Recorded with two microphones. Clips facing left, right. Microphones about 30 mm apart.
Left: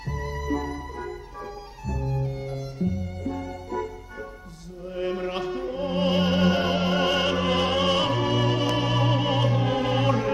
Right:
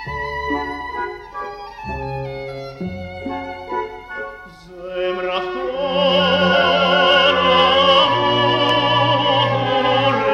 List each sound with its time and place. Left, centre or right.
0.1 s music: right